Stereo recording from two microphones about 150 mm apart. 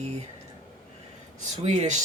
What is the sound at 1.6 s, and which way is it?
Speech, 50° right (ahead or behind).